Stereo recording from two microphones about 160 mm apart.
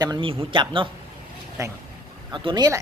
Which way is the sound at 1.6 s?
20° right (ahead or behind).